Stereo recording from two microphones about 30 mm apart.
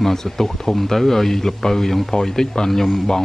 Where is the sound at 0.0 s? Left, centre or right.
Centre.